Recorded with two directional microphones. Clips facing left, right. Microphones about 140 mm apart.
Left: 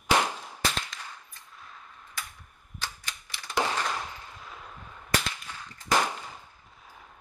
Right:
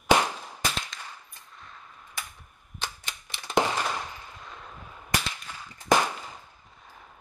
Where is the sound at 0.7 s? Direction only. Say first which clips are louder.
Even; centre (ahead or behind).